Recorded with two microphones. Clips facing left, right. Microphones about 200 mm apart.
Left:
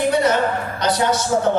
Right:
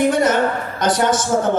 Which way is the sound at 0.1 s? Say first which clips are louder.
Right 1 dB; 50° right (ahead or behind).